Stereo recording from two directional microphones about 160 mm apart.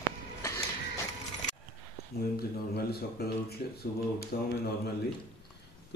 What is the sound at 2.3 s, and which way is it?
Speech, 80° left.